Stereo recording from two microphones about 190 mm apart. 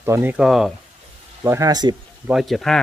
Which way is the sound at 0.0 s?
10° right (ahead or behind).